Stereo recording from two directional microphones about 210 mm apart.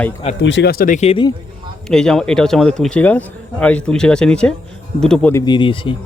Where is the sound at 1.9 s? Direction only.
5° left (ahead or behind).